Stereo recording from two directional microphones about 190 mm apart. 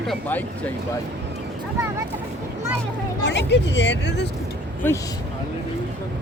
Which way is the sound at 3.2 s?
65° left (ahead or behind).